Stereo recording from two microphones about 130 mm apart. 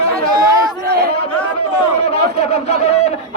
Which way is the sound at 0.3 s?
30° right (ahead or behind).